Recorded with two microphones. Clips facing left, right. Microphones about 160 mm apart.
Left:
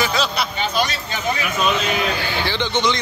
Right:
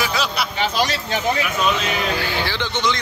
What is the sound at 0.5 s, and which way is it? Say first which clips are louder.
Speech: right 1 dB; 90° right.